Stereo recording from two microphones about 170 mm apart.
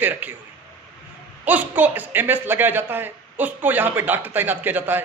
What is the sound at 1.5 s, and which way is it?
Speech, 10° right (ahead or behind).